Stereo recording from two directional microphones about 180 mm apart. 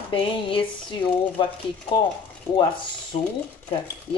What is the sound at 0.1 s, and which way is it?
Speech, 30° left (ahead or behind).